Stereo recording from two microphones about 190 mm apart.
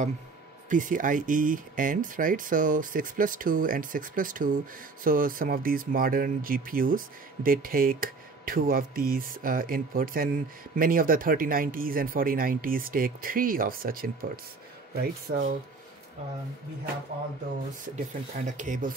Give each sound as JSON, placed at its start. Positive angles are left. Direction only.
{"t": 0.7, "sound": "speech", "side_deg": -45}
{"t": 17.9, "sound": "speech", "side_deg": -40}